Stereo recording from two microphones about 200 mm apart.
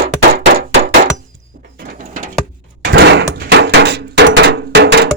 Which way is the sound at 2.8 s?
60° right (ahead or behind).